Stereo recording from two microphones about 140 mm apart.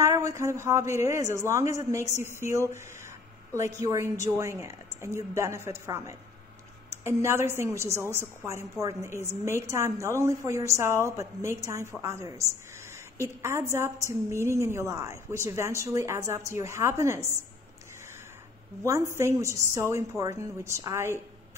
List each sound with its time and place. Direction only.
0.0 s a woman's voice: 25° right (ahead or behind)
3.8 s a woman's voice: 20° right (ahead or behind)
18.9 s a woman's voice: 20° right (ahead or behind)